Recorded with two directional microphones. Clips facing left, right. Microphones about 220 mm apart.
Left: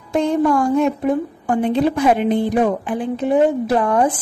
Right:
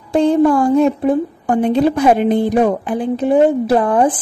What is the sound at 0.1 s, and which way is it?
A woman's voice, 35° right (ahead or behind).